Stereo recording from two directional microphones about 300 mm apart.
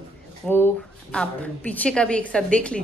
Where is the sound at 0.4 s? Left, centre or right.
Centre.